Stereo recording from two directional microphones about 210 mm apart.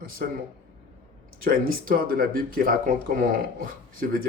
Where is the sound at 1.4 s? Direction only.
45° right (ahead or behind).